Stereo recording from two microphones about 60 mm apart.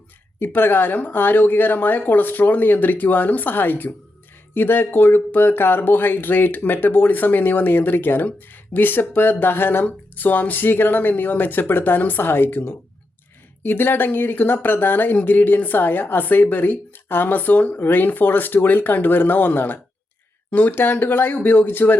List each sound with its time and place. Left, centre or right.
0.3 s speech: left